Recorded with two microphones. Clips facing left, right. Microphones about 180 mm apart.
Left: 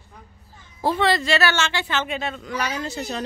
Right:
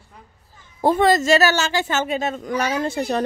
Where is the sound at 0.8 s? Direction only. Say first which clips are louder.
Right 5 dB; 45° right (ahead or behind).